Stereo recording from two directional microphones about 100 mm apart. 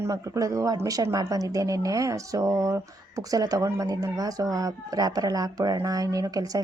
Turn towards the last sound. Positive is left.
turn(degrees=-35)  # may be behind; listen again after turning